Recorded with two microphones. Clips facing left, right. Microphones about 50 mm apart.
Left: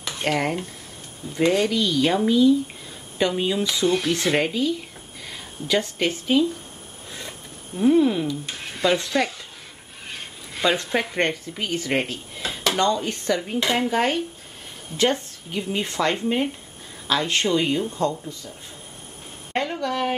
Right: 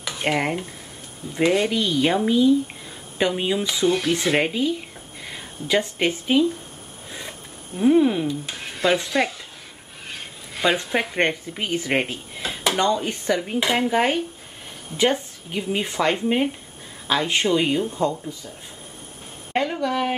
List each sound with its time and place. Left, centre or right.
0.2 s a woman's voice: centre
4.5 s speech: centre
7.1 s a sound: centre
8.9 s speech: centre
10.1 s a sound: centre
10.9 s a woman's voice: centre
11.1 s speech: centre
19.5 s a woman's voice: centre